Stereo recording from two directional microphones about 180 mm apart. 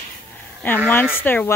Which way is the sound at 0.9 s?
10° left (ahead or behind).